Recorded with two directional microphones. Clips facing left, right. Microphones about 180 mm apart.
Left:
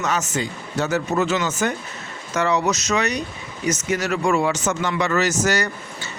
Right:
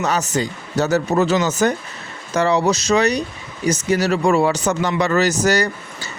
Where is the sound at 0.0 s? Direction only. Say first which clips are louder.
Right 3 dB; 35° right (ahead or behind).